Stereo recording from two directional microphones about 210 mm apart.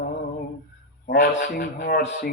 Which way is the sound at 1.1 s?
50° left (ahead or behind).